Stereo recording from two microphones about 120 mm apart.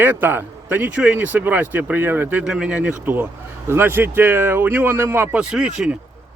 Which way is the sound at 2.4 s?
5° right (ahead or behind).